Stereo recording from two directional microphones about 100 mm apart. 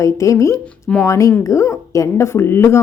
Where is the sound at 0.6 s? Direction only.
10° left (ahead or behind).